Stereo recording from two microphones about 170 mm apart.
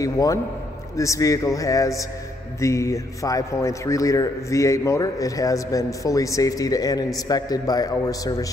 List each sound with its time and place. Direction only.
0.0 s a man's voice: 20° left (ahead or behind)